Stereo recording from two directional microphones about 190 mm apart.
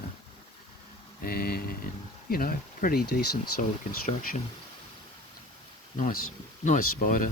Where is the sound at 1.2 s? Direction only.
55° left (ahead or behind).